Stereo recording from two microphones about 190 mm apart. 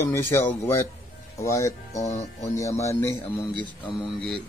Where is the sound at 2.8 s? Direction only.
15° left (ahead or behind).